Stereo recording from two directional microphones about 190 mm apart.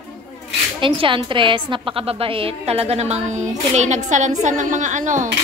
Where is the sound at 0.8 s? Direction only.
25° right (ahead or behind).